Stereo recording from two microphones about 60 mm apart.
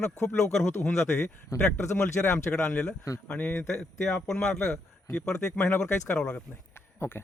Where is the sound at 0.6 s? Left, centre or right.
Left.